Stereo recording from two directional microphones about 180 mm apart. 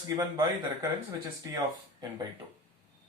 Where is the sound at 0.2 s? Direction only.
20° right (ahead or behind).